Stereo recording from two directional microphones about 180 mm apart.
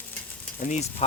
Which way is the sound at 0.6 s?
40° left (ahead or behind).